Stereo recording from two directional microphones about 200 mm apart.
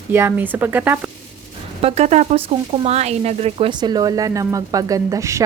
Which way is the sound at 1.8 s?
30° right (ahead or behind).